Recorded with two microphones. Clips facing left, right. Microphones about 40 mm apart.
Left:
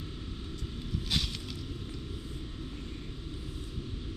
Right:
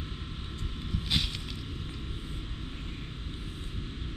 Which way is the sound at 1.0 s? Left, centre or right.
Right.